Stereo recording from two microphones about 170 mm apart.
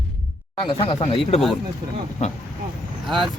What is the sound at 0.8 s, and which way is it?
Speech, 35° left (ahead or behind).